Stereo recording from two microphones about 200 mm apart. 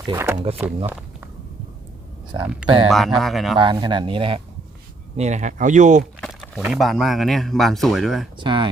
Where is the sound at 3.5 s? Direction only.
25° right (ahead or behind).